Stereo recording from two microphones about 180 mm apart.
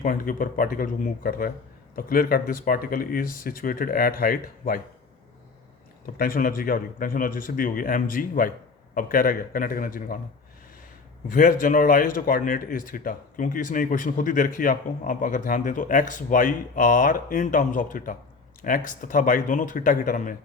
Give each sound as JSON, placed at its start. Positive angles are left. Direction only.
{"t": 0.0, "sound": "speech", "side_deg": 50}
{"t": 6.1, "sound": "speech", "side_deg": 55}
{"t": 11.3, "sound": "speech", "side_deg": 50}